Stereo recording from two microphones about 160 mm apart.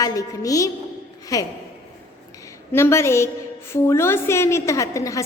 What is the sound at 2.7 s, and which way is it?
A woman's voice, 15° left (ahead or behind).